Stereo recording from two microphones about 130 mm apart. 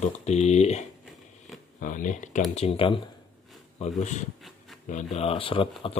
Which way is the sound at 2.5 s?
45° left (ahead or behind).